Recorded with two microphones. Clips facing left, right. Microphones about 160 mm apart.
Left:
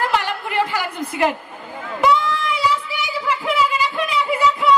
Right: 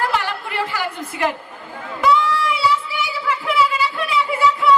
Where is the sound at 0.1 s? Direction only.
20° left (ahead or behind).